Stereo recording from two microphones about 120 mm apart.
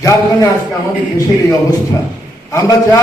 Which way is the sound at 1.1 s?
25° left (ahead or behind).